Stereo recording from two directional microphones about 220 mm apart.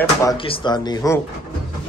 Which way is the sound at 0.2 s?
20° left (ahead or behind).